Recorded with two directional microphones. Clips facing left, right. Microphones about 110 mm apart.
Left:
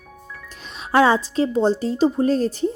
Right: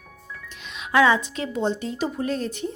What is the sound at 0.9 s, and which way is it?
Speech, 35° left (ahead or behind).